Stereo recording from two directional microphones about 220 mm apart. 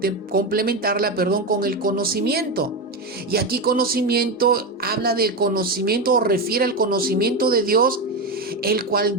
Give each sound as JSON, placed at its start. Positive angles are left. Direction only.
{"t": 0.0, "sound": "speech", "side_deg": -40}